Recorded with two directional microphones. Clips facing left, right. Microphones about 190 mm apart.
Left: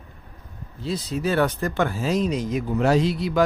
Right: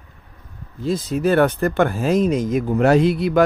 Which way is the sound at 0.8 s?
50° right (ahead or behind).